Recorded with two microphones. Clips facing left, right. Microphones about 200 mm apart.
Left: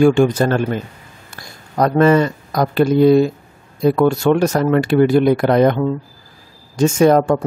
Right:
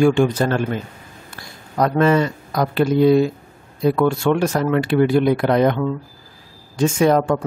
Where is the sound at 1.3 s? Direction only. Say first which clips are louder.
Left 2 dB; 45° left (ahead or behind).